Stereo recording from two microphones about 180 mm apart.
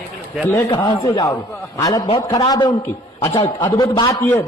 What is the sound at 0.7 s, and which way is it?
A man's voice, 25° left (ahead or behind).